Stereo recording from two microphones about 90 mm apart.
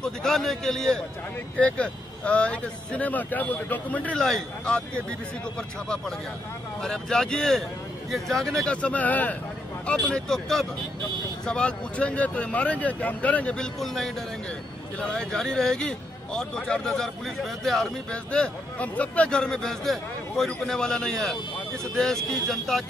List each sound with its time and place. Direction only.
0.0 s speech: 5° left (ahead or behind)
4.2 s speech: 5° left (ahead or behind)
6.8 s speech: 5° left (ahead or behind)
8.6 s speech: 15° left (ahead or behind)
13.7 s speech: 5° left (ahead or behind)